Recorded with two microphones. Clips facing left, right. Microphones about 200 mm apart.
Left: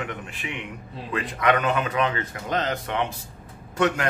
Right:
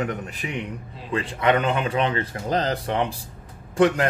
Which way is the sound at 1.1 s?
30° right (ahead or behind).